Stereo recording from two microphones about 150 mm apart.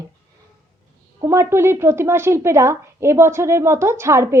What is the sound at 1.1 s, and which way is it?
A woman's voice, 20° right (ahead or behind).